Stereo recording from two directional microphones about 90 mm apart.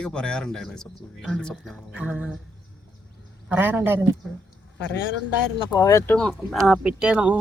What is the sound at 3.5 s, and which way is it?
Speech, 20° right (ahead or behind).